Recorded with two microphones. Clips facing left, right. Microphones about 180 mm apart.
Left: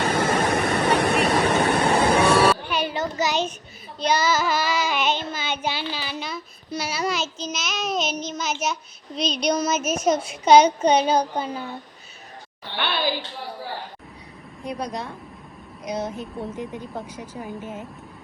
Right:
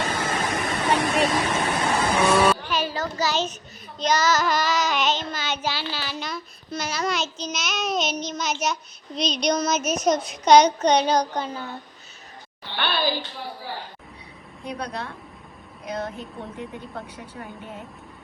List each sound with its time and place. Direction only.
0.0 s vehicle: 60° left (ahead or behind)
2.6 s a sound: 20° left (ahead or behind)
4.0 s child singing: 10° left (ahead or behind)
5.9 s a child's voice: 10° left (ahead or behind)
10.4 s child singing: 5° left (ahead or behind)
12.7 s a woman's voice: 20° left (ahead or behind)
14.7 s a child's voice: 5° left (ahead or behind)